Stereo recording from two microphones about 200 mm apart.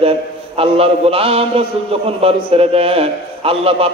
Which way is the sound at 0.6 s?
30° right (ahead or behind).